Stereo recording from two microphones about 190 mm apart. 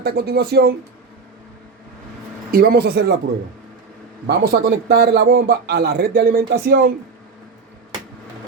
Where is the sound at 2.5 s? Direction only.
55° right (ahead or behind).